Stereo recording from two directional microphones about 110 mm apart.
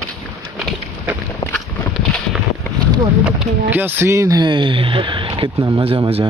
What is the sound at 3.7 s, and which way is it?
Speech, 20° right (ahead or behind).